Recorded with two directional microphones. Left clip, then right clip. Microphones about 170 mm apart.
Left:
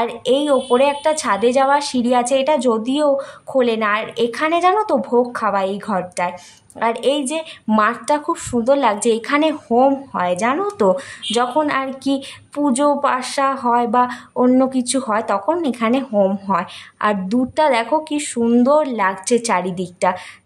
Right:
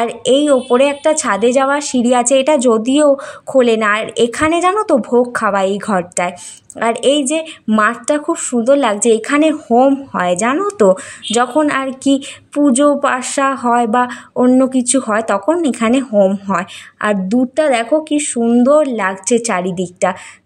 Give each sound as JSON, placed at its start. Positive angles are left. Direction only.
{"t": 0.0, "sound": "a woman's voice", "side_deg": -20}
{"t": 10.1, "sound": "a woman's voice", "side_deg": -25}